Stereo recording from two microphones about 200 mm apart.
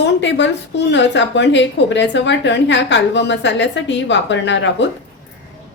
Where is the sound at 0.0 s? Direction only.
65° left (ahead or behind).